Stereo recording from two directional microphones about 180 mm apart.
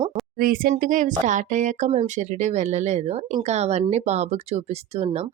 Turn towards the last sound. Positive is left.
turn(degrees=-35)  # may be behind; listen again after turning